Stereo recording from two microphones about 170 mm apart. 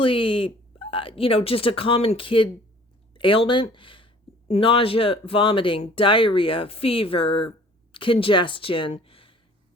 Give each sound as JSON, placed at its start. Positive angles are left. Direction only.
{"t": 0.0, "sound": "speech", "side_deg": 30}